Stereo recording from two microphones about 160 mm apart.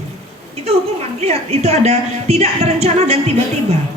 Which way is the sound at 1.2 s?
40° right (ahead or behind).